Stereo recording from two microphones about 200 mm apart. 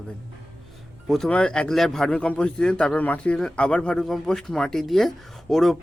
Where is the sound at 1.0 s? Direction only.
Centre (ahead or behind).